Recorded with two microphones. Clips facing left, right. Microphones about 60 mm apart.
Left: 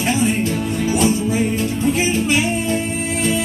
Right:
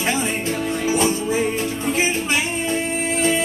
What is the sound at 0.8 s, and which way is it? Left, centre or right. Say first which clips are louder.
Music: left 2 dB; right.